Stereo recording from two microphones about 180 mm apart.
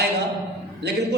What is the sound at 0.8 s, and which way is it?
Speech, 70° right (ahead or behind).